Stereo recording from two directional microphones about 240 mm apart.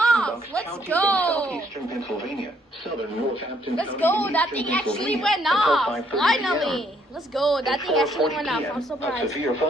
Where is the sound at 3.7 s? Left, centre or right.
Centre.